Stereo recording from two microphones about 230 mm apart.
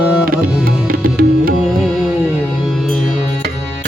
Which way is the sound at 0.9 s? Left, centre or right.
Right.